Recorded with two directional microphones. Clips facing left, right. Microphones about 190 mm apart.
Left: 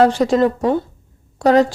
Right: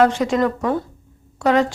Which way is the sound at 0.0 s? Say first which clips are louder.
Left 3 dB; 35° left (ahead or behind).